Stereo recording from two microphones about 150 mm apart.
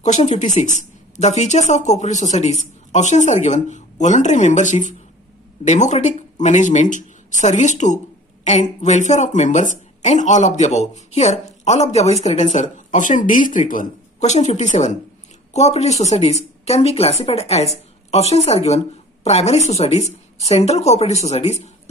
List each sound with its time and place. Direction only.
0.0 s speech: 50° left (ahead or behind)